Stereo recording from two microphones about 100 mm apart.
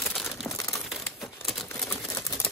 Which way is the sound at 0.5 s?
30° left (ahead or behind).